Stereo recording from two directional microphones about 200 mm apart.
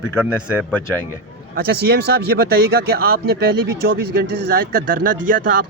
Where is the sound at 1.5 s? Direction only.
55° right (ahead or behind).